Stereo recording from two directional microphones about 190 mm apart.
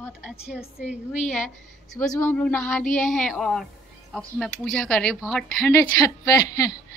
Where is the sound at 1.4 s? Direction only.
Centre (ahead or behind).